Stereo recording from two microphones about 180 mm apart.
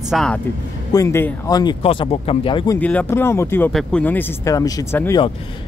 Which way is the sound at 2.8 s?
10° left (ahead or behind).